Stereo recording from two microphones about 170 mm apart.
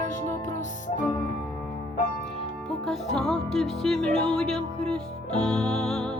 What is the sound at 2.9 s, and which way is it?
Music, centre (ahead or behind).